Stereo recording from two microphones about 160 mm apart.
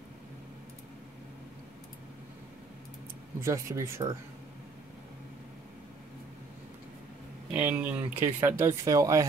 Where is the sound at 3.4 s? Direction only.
20° right (ahead or behind).